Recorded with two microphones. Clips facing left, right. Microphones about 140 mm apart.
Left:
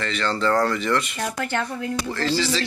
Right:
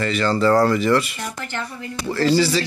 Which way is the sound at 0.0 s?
5° right (ahead or behind).